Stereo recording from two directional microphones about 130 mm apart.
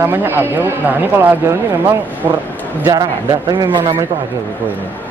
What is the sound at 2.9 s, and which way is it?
Speech, 30° right (ahead or behind).